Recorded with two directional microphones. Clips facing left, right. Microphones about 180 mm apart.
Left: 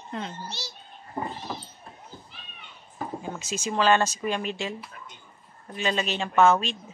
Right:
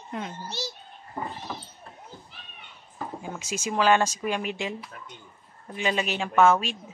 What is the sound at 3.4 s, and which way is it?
Speech, 10° right (ahead or behind).